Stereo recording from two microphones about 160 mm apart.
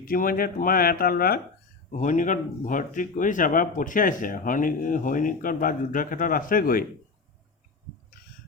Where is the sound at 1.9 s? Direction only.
50° left (ahead or behind).